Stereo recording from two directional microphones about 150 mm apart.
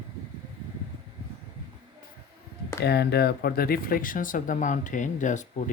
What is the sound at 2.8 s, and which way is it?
Speech, 90° left.